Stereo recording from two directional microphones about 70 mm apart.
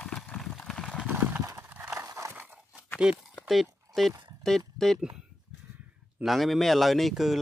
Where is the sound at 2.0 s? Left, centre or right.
Right.